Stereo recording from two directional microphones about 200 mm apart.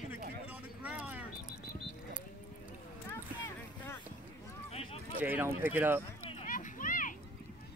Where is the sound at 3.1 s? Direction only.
15° left (ahead or behind).